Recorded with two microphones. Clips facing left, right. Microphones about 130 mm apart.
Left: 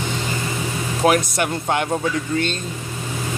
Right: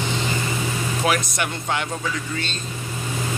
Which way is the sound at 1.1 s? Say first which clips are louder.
Left 6 dB; 45° left (ahead or behind).